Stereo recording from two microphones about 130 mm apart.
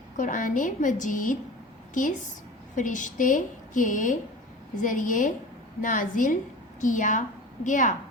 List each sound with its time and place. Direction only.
0.2 s a woman's voice: 90° left
6.8 s a woman's voice: 75° left (ahead or behind)